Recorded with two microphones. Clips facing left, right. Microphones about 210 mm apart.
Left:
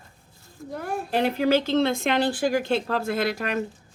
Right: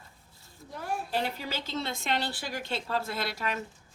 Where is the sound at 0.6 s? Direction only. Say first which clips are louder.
Left 5 dB; 50° left (ahead or behind).